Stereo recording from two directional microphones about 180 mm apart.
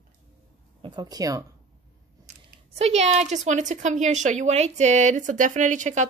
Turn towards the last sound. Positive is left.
turn(degrees=-40)  # may be behind; listen again after turning